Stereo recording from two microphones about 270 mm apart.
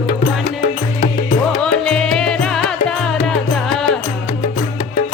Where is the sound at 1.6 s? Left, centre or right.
Centre.